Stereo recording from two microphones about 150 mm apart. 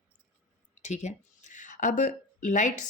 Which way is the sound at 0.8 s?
50° left (ahead or behind).